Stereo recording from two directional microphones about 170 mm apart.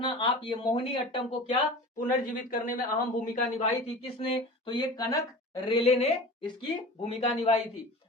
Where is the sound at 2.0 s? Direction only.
50° left (ahead or behind).